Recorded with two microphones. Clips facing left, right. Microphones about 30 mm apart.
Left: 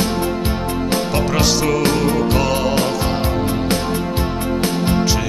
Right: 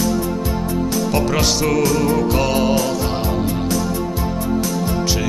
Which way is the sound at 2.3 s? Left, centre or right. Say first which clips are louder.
Even; centre.